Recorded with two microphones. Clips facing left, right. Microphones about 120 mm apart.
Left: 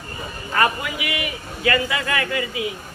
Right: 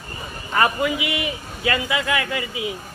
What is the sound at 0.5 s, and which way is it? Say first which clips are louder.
A man's voice: right 2 dB; 20° right (ahead or behind).